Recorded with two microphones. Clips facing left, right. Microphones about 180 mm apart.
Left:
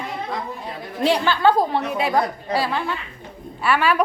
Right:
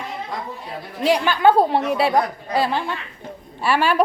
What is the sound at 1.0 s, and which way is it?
A woman's voice, 15° right (ahead or behind).